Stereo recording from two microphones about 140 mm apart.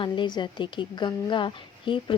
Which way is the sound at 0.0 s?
35° left (ahead or behind).